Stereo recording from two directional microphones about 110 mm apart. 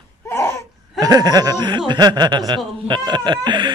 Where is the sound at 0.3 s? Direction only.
25° left (ahead or behind).